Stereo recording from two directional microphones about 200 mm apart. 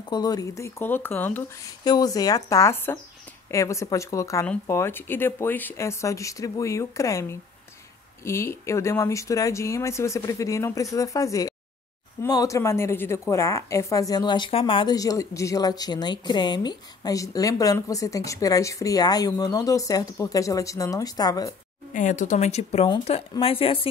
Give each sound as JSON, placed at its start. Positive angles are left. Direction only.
{"t": 0.1, "sound": "a woman's voice", "side_deg": 20}
{"t": 21.9, "sound": "speech", "side_deg": 40}